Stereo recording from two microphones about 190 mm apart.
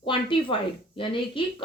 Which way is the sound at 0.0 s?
25° left (ahead or behind).